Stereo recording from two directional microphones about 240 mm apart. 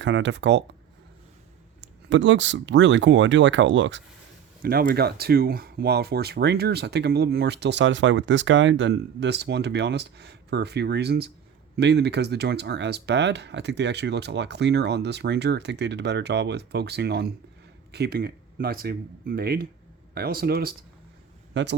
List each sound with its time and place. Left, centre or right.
0.0 s speech: right
2.0 s speech: right
4.6 s a man's voice: right